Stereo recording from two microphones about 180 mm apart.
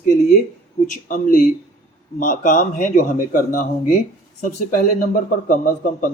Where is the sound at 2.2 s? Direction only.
45° left (ahead or behind).